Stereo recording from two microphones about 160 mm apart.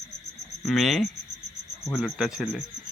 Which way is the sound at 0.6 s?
Centre (ahead or behind).